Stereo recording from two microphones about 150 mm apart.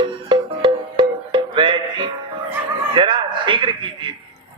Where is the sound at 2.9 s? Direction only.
30° right (ahead or behind).